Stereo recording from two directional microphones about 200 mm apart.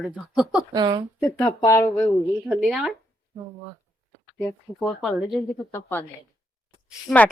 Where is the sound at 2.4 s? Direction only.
Centre (ahead or behind).